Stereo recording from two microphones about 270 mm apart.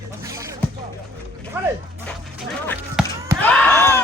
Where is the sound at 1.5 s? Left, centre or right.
Centre.